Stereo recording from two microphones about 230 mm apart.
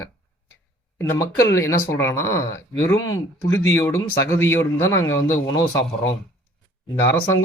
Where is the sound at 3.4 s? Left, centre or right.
Left.